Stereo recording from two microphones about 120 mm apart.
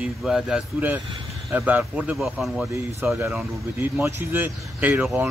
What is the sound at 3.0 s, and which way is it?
Speech, 15° right (ahead or behind).